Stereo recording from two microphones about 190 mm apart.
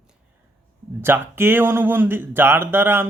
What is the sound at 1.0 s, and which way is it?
Speech, 10° right (ahead or behind).